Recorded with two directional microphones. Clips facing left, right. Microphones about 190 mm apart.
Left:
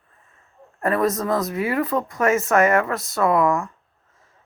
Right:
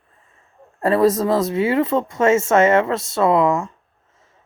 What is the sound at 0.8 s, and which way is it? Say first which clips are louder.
Speech: right 5 dB; 30° right (ahead or behind).